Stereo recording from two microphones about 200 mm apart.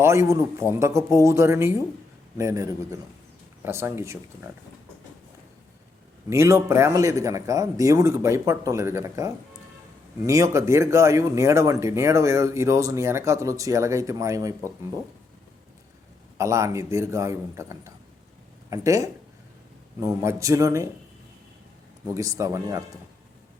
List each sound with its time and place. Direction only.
0.0 s speech: 15° right (ahead or behind)
6.3 s speech: 15° right (ahead or behind)
16.4 s speech: 15° right (ahead or behind)
22.0 s speech: 15° right (ahead or behind)